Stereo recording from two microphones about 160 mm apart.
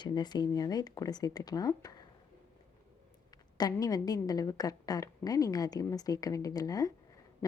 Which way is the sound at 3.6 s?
25° left (ahead or behind).